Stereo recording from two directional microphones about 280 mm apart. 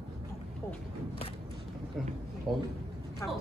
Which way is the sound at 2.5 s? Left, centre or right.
Centre.